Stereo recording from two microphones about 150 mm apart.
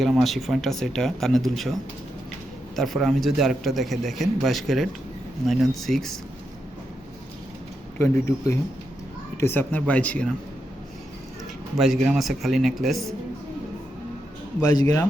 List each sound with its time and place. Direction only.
0.0 s a man's voice: centre (ahead or behind)
2.7 s a man's voice: centre (ahead or behind)
7.9 s speech: 15° left (ahead or behind)
11.8 s a man's voice: 5° right (ahead or behind)
14.6 s speech: 25° left (ahead or behind)